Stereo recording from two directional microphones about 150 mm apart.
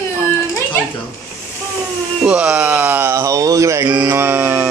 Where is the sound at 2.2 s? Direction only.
10° right (ahead or behind).